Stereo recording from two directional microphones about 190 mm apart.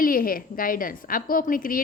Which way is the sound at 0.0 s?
50° left (ahead or behind).